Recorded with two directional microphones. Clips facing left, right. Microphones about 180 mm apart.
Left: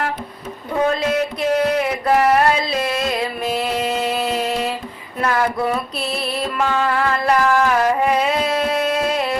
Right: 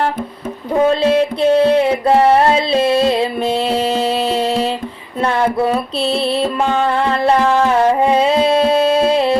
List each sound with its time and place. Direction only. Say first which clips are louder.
0.8 s music: right 6 dB; 30° right (ahead or behind)